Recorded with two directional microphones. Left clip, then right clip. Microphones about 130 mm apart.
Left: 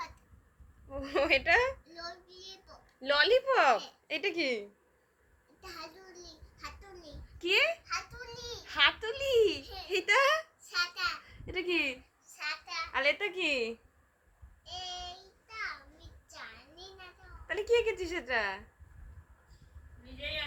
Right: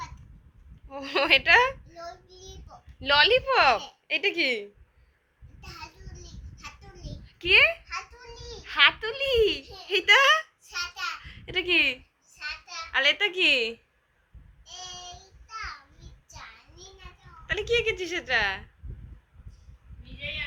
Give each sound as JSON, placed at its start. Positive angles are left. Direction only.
{"t": 0.9, "sound": "a sound", "side_deg": 20}
{"t": 1.2, "sound": "a child's voice", "side_deg": 0}
{"t": 2.2, "sound": "child singing", "side_deg": -25}
{"t": 3.0, "sound": "a child's voice", "side_deg": 0}
{"t": 3.3, "sound": "a woman's voice", "side_deg": 10}
{"t": 7.3, "sound": "a child's voice", "side_deg": 0}
{"t": 8.6, "sound": "a sound", "side_deg": 5}
{"t": 9.0, "sound": "a child's voice", "side_deg": 5}
{"t": 11.2, "sound": "a sound", "side_deg": 0}
{"t": 12.9, "sound": "a child's voice", "side_deg": 0}
{"t": 17.4, "sound": "a woman's voice", "side_deg": 15}